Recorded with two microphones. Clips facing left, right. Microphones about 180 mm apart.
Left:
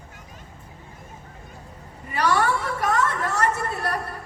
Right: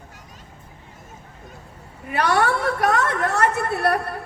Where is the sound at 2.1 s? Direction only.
60° right (ahead or behind).